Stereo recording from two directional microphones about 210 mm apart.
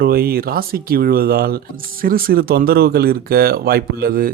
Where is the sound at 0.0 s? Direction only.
45° right (ahead or behind).